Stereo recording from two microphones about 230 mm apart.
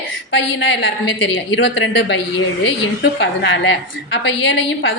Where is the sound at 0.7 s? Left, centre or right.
Left.